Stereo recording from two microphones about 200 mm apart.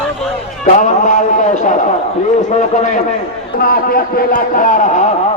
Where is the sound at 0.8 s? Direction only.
40° left (ahead or behind).